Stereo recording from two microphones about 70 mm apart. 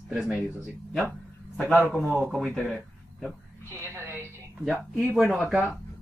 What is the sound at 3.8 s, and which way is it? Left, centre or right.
Speech, right.